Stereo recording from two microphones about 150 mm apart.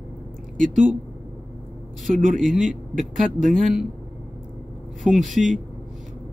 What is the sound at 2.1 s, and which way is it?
Speech, 60° right (ahead or behind).